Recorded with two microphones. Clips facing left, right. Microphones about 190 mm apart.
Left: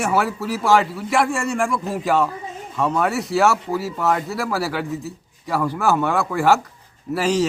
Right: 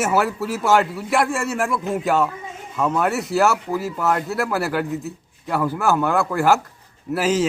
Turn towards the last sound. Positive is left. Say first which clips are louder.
# even
turn(degrees=0)  # may be behind; listen again after turning